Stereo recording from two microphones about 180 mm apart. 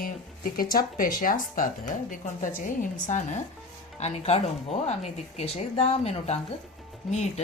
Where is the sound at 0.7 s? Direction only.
50° left (ahead or behind).